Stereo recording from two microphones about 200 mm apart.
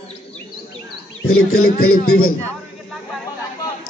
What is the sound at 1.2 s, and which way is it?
Speech, 90° left.